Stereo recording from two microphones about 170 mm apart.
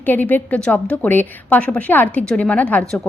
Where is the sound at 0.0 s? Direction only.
10° left (ahead or behind).